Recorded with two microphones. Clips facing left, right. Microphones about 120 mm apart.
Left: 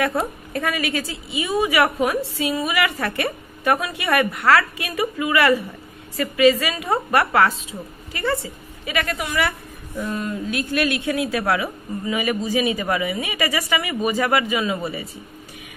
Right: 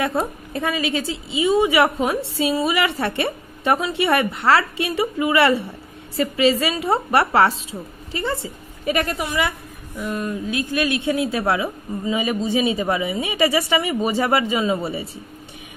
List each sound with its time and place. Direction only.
0.5 s a woman's voice: 20° right (ahead or behind)
8.8 s a woman's voice: 40° right (ahead or behind)
9.9 s a woman's voice: 15° right (ahead or behind); by 15.0 s 30° right (ahead or behind)